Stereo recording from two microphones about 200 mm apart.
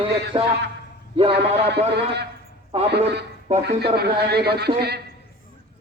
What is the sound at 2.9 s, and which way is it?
Speech, 55° right (ahead or behind).